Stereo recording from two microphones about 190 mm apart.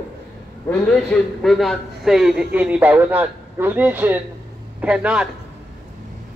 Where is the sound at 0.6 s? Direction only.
5° left (ahead or behind).